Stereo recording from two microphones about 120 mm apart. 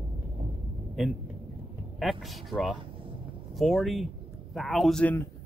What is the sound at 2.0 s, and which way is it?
Speech, centre (ahead or behind).